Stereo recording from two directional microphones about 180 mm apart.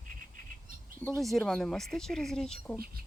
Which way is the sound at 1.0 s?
Centre (ahead or behind).